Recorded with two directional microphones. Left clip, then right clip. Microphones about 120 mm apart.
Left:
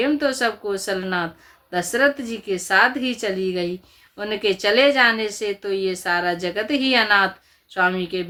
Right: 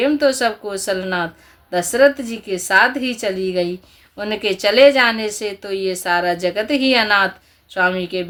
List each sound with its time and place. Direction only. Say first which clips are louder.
0.0 s speech: right 4 dB; 40° right (ahead or behind)